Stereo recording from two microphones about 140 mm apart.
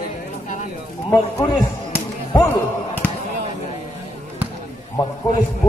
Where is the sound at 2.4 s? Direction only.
15° left (ahead or behind).